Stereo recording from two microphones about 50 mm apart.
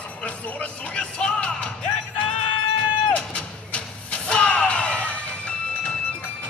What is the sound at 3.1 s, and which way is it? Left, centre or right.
Music, left.